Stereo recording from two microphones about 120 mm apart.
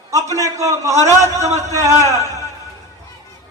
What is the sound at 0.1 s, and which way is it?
A man's voice, 25° right (ahead or behind).